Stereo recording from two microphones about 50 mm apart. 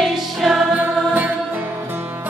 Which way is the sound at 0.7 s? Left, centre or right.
Right.